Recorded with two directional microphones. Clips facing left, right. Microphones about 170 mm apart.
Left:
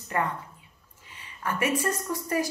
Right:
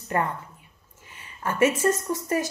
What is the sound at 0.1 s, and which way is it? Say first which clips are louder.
Speech: right 2 dB; 30° right (ahead or behind).